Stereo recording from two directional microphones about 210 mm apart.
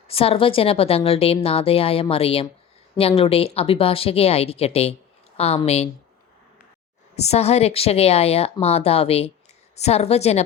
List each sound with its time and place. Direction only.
0.1 s a woman's voice: 25° left (ahead or behind)
7.2 s a woman's voice: 30° left (ahead or behind)